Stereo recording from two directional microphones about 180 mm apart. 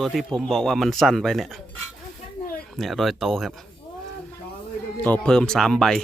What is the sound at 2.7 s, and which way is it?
Speech, centre (ahead or behind).